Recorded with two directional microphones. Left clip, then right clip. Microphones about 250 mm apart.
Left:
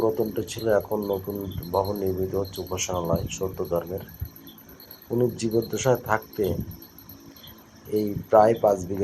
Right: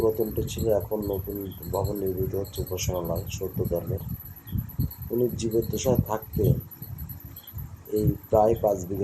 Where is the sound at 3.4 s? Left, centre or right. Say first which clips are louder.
Left 4 dB; centre.